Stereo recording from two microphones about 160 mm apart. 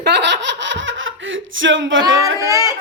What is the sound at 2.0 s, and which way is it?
Speech, 20° right (ahead or behind).